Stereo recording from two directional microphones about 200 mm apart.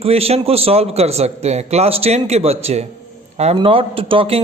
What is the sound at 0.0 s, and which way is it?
A man's voice, 30° right (ahead or behind).